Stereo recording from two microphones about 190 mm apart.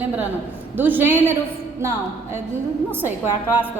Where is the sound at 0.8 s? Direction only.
10° right (ahead or behind).